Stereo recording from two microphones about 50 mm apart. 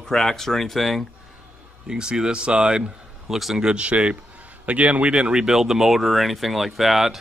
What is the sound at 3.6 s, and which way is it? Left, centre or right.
Speech, right.